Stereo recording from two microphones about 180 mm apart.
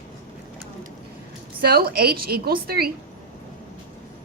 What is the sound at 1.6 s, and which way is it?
A woman's voice, 60° right (ahead or behind).